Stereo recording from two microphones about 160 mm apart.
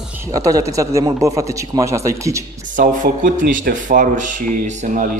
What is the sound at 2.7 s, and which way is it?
Speech, 55° right (ahead or behind).